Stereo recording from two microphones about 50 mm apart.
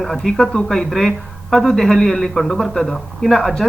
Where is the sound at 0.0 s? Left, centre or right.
Centre.